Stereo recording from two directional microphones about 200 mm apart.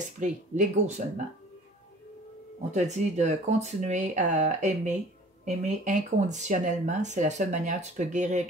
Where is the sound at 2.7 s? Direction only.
35° right (ahead or behind).